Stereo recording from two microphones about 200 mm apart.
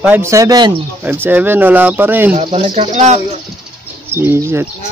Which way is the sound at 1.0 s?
10° right (ahead or behind).